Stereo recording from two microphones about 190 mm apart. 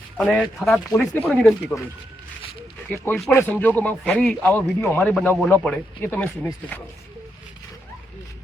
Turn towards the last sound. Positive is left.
turn(degrees=10)  # may be behind; listen again after turning